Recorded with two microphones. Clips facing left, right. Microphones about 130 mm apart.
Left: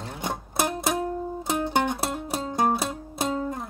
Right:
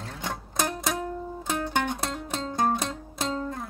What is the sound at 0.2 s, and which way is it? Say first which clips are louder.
Music: left 3 dB; 15° left (ahead or behind).